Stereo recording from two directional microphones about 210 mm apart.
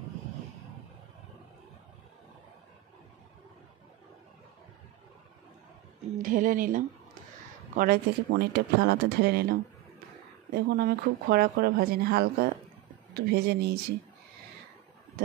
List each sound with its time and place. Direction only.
6.1 s a woman's voice: 40° right (ahead or behind)